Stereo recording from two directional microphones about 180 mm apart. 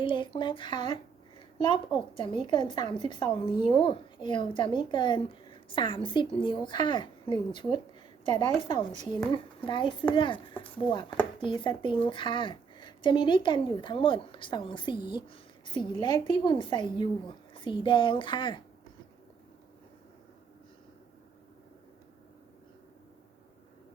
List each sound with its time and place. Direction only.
0.0 s a woman's voice: 30° left (ahead or behind)